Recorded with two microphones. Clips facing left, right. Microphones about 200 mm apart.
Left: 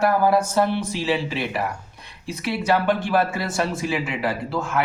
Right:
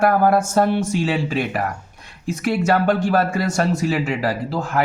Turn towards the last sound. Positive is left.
turn(degrees=-35)  # may be behind; listen again after turning